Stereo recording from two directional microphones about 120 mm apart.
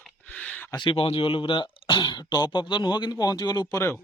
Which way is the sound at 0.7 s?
40° left (ahead or behind).